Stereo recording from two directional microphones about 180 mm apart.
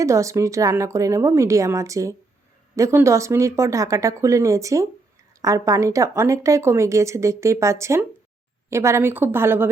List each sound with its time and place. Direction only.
0.0 s speech: 15° right (ahead or behind)